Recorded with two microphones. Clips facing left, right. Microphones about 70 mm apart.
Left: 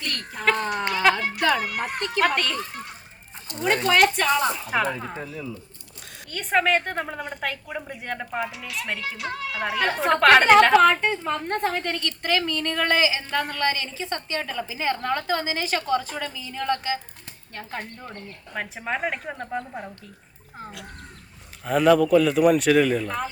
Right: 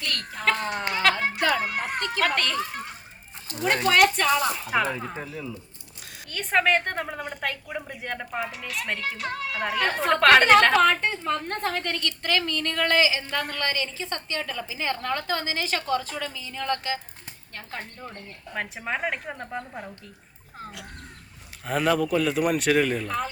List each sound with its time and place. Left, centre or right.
0.0 s a sound: left
0.7 s a sound: right
2.3 s a woman's voice: centre
3.8 s a woman's voice: centre
6.3 s a woman's voice: centre
8.4 s speech: right
9.6 s a woman's voice: centre
11.9 s a woman's voice: left
18.5 s a woman's voice: centre
21.7 s a woman's voice: centre
23.0 s a woman's voice: centre